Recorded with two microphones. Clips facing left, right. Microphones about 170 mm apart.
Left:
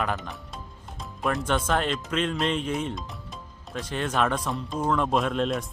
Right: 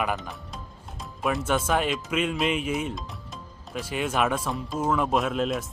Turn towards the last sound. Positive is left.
turn(degrees=-5)  # may be behind; listen again after turning